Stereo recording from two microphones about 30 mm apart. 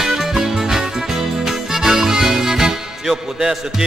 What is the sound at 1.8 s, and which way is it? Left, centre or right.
Music, centre.